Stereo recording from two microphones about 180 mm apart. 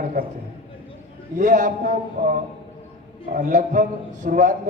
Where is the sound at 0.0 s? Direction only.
50° right (ahead or behind).